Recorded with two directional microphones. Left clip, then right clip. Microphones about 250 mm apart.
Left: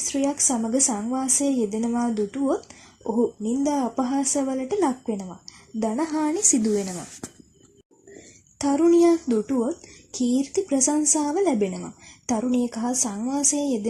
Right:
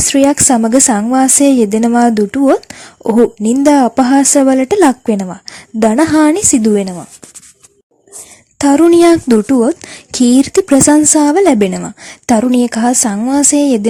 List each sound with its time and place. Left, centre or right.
0.1 s speech: right
8.5 s speech: right